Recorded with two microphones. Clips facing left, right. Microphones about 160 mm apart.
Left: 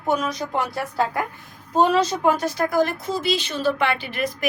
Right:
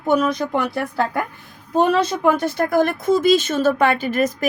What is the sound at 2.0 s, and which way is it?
A child's voice, 60° right (ahead or behind).